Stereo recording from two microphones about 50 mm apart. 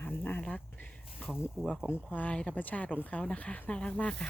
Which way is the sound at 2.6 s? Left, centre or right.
Left.